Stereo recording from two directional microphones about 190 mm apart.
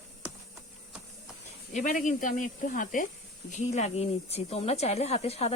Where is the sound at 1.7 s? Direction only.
45° left (ahead or behind).